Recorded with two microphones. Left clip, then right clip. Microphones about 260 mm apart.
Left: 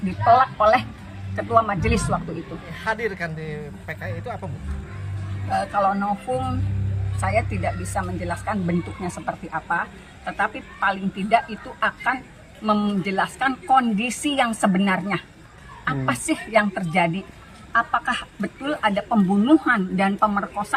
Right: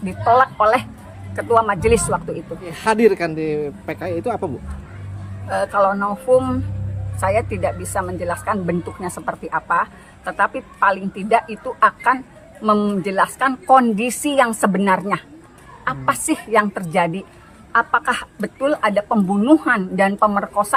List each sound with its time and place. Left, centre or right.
0.3 s speech: centre
2.6 s speech: right
5.5 s speech: centre